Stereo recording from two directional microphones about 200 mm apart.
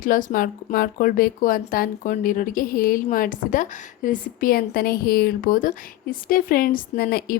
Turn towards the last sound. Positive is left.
turn(degrees=50)  # may be behind; listen again after turning